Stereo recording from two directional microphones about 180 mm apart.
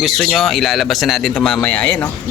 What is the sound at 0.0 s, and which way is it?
Speech, centre (ahead or behind).